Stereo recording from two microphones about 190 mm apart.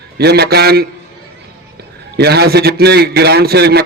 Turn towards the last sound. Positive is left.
turn(degrees=-55)  # may be behind; listen again after turning